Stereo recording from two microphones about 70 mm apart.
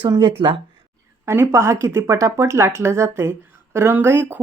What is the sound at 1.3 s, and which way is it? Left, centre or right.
A woman's voice, right.